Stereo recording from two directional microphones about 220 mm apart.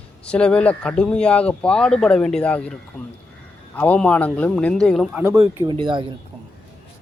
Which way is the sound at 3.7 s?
5° left (ahead or behind).